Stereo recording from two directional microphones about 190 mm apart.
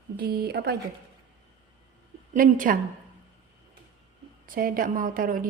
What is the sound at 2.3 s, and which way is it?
Speech, 45° right (ahead or behind).